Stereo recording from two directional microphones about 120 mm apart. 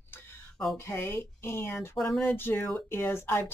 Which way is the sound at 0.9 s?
20° left (ahead or behind).